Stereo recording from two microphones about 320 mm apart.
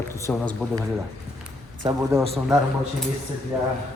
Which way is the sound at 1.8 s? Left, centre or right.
Centre.